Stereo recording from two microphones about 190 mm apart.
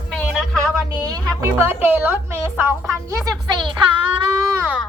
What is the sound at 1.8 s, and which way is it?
A woman's voice, 10° right (ahead or behind).